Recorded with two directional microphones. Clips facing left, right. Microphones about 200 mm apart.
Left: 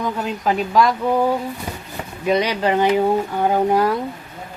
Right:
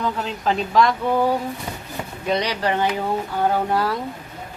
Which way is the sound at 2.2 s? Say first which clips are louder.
Left 4 dB; 15° left (ahead or behind).